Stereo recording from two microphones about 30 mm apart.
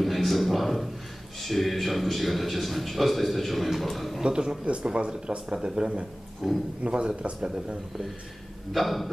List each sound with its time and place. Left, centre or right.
0.0 s a sound: centre
1.4 s speech: centre
4.2 s speech: right
6.4 s a man's voice: centre
6.8 s a man's voice: right
8.7 s speech: centre